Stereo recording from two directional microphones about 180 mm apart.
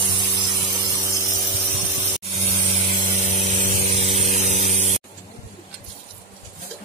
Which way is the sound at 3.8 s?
35° right (ahead or behind).